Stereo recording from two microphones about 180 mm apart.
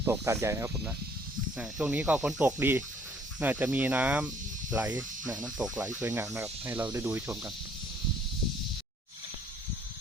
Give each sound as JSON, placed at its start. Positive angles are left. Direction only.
{"t": 0.0, "sound": "speech", "side_deg": -15}
{"t": 4.9, "sound": "speech", "side_deg": -20}
{"t": 5.4, "sound": "speech", "side_deg": -5}